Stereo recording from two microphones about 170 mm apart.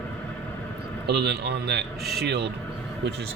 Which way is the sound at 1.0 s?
75° right (ahead or behind).